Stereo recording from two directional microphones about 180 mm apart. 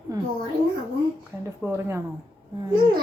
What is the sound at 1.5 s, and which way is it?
Speech, 15° right (ahead or behind).